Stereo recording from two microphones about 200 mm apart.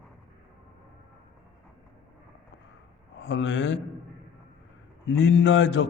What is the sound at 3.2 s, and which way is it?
Speech, 65° left (ahead or behind).